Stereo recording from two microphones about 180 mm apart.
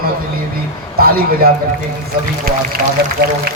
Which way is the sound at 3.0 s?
65° right (ahead or behind).